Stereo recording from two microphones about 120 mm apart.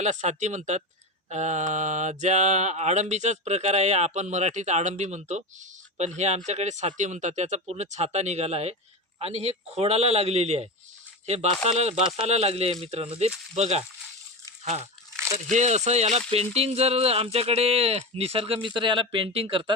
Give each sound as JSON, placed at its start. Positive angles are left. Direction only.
{"t": 0.0, "sound": "mantra", "side_deg": -75}
{"t": 9.1, "sound": "speech", "side_deg": -55}